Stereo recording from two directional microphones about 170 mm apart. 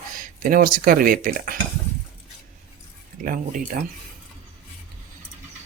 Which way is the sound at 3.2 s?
55° right (ahead or behind).